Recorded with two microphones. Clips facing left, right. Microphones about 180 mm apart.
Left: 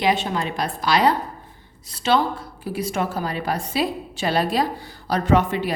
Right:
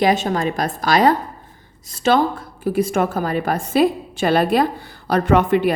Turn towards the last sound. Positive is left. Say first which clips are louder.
# right 4 dB
turn(degrees=-55)  # may be behind; listen again after turning